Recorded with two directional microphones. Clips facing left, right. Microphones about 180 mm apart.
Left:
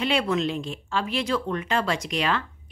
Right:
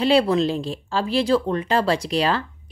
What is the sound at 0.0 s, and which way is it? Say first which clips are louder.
Speech: right 6 dB; 35° right (ahead or behind).